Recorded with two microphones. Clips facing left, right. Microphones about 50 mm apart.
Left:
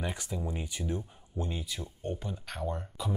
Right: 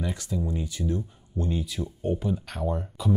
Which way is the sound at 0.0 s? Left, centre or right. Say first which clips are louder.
Right 5 dB; left.